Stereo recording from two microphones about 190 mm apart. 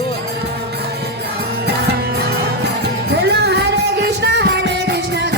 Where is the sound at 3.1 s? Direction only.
60° right (ahead or behind).